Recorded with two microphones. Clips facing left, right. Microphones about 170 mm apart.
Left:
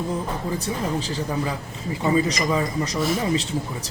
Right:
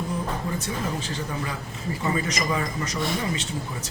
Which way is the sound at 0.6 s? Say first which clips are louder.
Left 4 dB; 35° left (ahead or behind).